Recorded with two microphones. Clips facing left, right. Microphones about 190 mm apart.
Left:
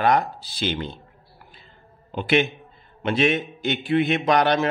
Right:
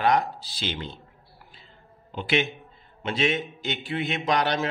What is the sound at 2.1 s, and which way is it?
A man's voice, 55° left (ahead or behind).